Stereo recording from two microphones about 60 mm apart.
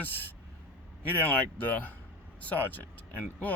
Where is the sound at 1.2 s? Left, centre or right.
Left.